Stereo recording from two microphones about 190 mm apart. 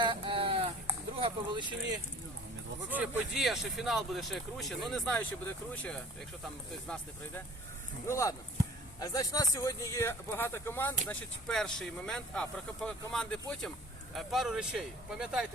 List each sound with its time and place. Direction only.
0.0 s a sound: 25° right (ahead or behind)
1.1 s speech: 25° right (ahead or behind)
2.9 s speech: 5° right (ahead or behind)